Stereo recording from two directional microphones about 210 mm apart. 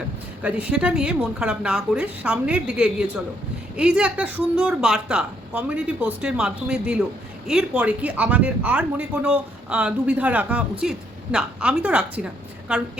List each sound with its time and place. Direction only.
0.4 s speech: 5° right (ahead or behind)